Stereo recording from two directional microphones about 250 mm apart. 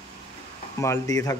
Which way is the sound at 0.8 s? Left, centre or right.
Centre.